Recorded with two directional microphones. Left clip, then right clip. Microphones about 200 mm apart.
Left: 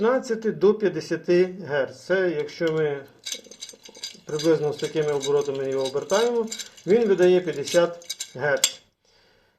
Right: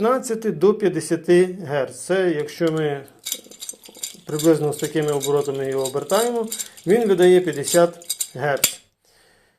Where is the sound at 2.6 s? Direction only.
30° right (ahead or behind).